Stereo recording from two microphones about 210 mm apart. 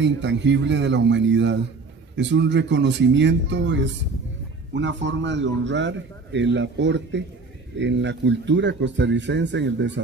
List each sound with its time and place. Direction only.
0.0 s a man's voice: 60° right (ahead or behind)